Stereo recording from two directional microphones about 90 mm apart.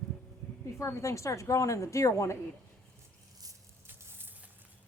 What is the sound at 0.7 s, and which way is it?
A woman's voice, 35° left (ahead or behind).